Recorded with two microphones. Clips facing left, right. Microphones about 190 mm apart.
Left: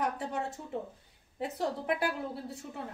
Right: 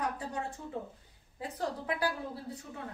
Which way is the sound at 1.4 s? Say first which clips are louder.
Left 3 dB; 25° left (ahead or behind).